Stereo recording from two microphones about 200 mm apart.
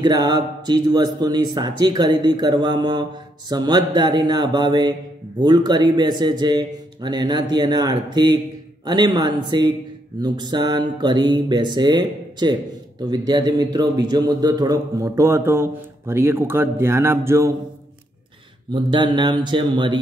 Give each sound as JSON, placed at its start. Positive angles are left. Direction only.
{"t": 0.0, "sound": "speech", "side_deg": -20}
{"t": 18.7, "sound": "speech", "side_deg": -25}